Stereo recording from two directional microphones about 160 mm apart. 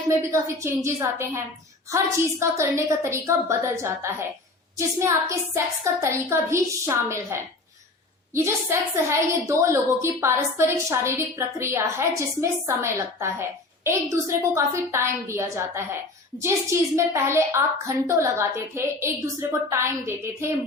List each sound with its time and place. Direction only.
0.1 s a woman's voice: 15° right (ahead or behind)